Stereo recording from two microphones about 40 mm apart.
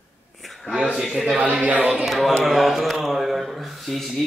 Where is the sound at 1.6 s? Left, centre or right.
Right.